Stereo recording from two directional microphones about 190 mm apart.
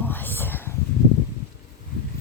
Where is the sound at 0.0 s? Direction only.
10° left (ahead or behind).